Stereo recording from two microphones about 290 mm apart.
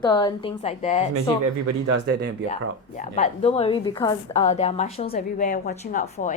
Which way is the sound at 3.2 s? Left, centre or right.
Left.